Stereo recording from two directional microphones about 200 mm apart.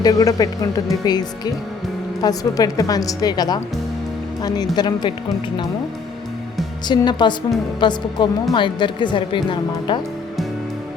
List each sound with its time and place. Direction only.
0.0 s speech: 20° left (ahead or behind)
6.8 s speech: 20° left (ahead or behind)